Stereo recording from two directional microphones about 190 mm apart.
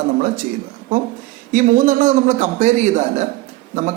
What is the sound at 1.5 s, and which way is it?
Speech, 40° right (ahead or behind).